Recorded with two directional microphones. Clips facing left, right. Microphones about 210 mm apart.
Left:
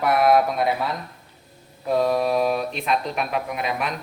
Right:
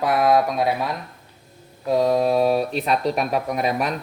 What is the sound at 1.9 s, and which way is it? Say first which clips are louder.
Speech: right 2 dB; 20° right (ahead or behind).